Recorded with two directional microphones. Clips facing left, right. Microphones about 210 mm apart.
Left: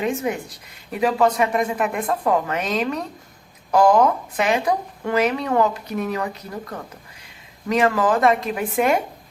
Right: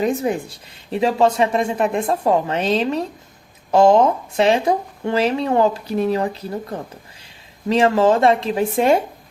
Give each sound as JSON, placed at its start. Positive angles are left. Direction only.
{"t": 0.0, "sound": "speech", "side_deg": -35}